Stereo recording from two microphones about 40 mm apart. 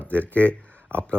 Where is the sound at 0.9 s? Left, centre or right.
Right.